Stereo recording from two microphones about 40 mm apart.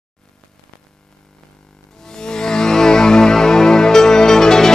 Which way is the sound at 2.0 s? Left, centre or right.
Centre.